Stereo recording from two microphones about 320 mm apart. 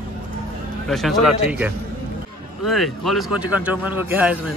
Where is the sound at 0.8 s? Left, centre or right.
Centre.